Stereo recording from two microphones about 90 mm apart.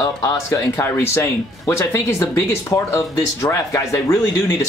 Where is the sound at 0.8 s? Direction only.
25° left (ahead or behind).